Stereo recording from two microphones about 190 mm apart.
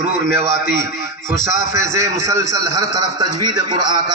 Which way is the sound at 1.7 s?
15° right (ahead or behind).